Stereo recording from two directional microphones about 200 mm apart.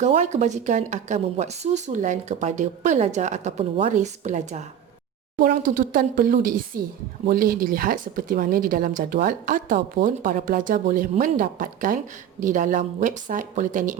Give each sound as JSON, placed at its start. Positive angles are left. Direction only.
{"t": 0.0, "sound": "speech", "side_deg": -35}